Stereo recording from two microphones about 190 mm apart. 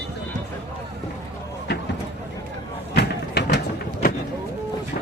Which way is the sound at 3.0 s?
60° left (ahead or behind).